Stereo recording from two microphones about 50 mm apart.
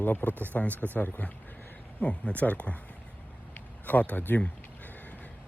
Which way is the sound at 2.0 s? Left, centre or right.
Left.